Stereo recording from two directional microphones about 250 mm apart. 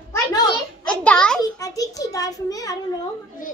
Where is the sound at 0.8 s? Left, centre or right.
Centre.